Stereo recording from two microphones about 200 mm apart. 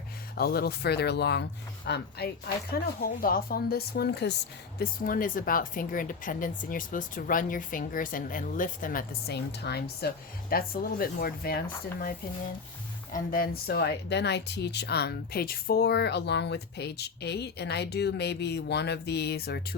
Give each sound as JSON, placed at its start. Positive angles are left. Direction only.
{"t": 0.3, "sound": "speech", "side_deg": 50}
{"t": 4.8, "sound": "speech", "side_deg": 45}
{"t": 13.1, "sound": "speech", "side_deg": 45}